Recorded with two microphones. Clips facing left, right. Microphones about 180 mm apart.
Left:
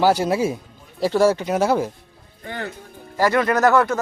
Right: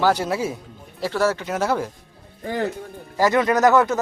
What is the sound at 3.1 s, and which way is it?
Speech, 15° right (ahead or behind).